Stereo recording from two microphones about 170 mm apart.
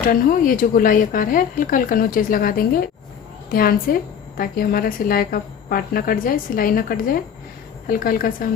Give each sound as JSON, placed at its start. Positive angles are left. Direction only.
{"t": 0.1, "sound": "a woman's voice", "side_deg": 55}